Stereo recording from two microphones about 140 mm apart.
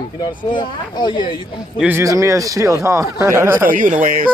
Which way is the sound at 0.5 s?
30° left (ahead or behind).